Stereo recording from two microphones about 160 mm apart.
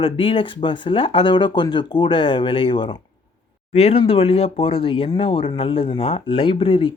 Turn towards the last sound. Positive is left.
turn(degrees=35)  # may be behind; listen again after turning